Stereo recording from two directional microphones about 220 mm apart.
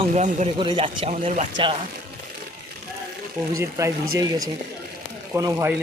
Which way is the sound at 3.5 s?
15° right (ahead or behind).